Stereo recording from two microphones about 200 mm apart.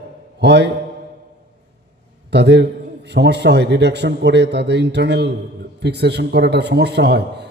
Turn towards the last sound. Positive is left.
turn(degrees=-55)  # may be behind; listen again after turning